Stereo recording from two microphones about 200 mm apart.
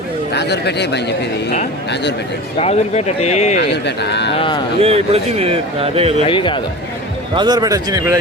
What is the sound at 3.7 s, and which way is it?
Speech, 60° left (ahead or behind).